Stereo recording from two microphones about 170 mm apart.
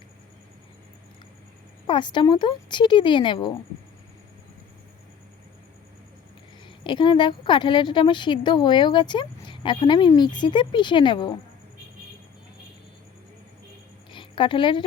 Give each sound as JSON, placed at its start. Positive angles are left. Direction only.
{"t": 1.9, "sound": "a woman's voice", "side_deg": 30}
{"t": 6.8, "sound": "a woman's voice", "side_deg": 30}
{"t": 14.1, "sound": "a woman's voice", "side_deg": 30}